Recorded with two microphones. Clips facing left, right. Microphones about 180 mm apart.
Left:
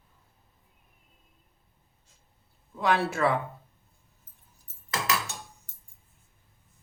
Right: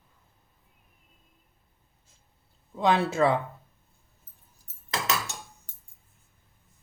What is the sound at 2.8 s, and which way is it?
Speech, 20° right (ahead or behind).